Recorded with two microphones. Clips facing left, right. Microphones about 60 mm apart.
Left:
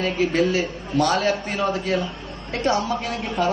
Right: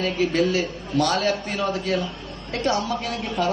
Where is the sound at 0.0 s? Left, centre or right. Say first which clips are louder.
Left 1 dB; left.